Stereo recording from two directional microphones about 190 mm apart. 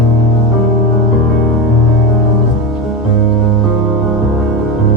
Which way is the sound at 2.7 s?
Centre (ahead or behind).